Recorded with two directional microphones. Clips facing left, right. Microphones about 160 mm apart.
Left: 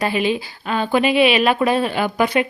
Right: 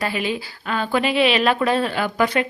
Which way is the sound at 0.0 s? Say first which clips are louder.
Left 4 dB; 20° left (ahead or behind).